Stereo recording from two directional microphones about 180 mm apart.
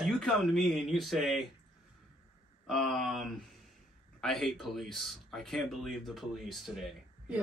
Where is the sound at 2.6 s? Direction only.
Centre (ahead or behind).